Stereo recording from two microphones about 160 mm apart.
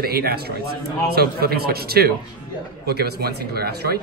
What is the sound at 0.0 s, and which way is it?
A man's voice, 75° right (ahead or behind).